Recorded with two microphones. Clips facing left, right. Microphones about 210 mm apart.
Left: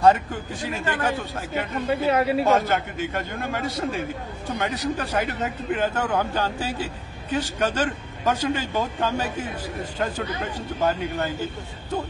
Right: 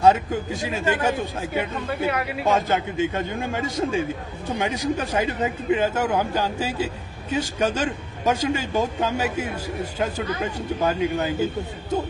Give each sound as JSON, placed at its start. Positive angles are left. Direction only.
{"t": 0.0, "sound": "a man's voice", "side_deg": -10}
{"t": 2.0, "sound": "speech", "side_deg": 30}
{"t": 2.5, "sound": "a man's voice", "side_deg": -15}